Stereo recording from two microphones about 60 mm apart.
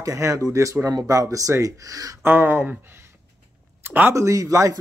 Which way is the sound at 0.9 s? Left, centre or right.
Right.